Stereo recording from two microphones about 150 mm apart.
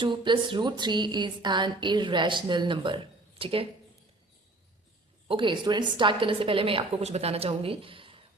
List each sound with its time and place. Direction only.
0.0 s speech: 30° right (ahead or behind)
5.3 s speech: 35° right (ahead or behind)